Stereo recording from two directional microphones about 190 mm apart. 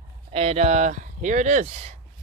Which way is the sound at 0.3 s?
30° right (ahead or behind).